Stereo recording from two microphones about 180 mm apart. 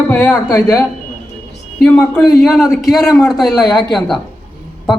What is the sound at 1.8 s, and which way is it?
A man's voice, 5° left (ahead or behind).